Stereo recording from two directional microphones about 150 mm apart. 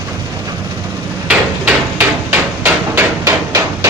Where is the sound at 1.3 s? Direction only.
15° right (ahead or behind).